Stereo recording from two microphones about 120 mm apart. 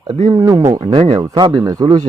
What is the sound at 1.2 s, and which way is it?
Speech, 35° right (ahead or behind).